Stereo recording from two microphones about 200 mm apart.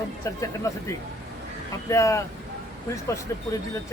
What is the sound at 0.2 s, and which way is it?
Speech, 15° left (ahead or behind).